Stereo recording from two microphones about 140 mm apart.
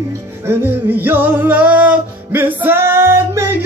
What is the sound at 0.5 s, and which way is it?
Music, 15° right (ahead or behind).